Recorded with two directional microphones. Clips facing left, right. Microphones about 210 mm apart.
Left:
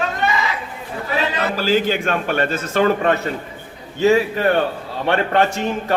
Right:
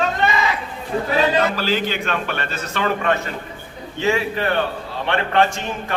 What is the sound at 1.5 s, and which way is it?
A man's voice, 45° left (ahead or behind).